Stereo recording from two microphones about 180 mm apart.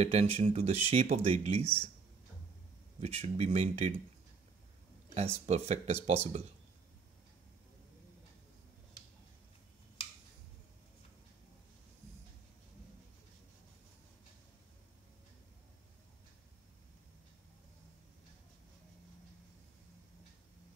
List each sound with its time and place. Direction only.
0.0 s speech: 35° right (ahead or behind)
3.0 s speech: 35° right (ahead or behind)
5.1 s speech: 35° right (ahead or behind)